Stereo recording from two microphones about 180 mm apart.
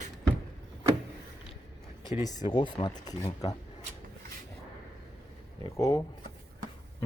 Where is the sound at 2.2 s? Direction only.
25° left (ahead or behind).